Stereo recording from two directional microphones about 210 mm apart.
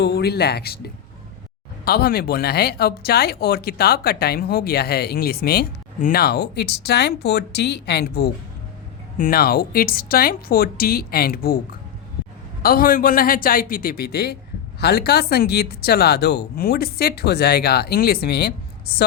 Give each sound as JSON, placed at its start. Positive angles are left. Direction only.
{"t": 0.0, "sound": "speech", "side_deg": 50}
{"t": 1.8, "sound": "speech", "side_deg": 45}
{"t": 12.6, "sound": "speech", "side_deg": 45}